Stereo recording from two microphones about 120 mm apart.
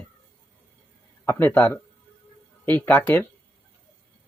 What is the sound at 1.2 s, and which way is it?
Speech, 15° left (ahead or behind).